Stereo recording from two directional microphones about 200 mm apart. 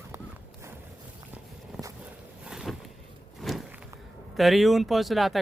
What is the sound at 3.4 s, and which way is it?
Walk, centre (ahead or behind).